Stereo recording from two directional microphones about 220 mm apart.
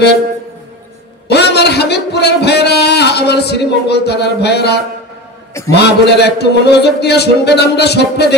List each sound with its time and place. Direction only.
1.3 s speech: 50° left (ahead or behind)